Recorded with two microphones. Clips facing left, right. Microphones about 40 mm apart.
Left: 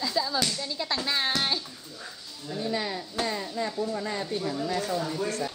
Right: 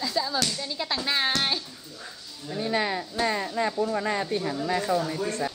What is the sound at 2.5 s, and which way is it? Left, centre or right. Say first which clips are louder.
A woman's voice: right 4 dB; right.